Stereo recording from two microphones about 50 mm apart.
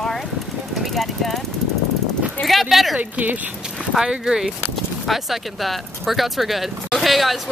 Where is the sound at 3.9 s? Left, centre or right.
Centre.